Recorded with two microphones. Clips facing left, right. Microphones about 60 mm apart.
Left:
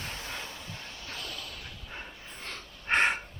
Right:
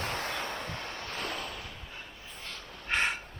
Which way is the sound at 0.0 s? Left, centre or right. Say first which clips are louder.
Right 5 dB; right.